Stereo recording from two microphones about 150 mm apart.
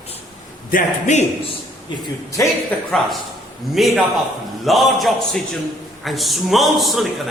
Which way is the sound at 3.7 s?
Centre (ahead or behind).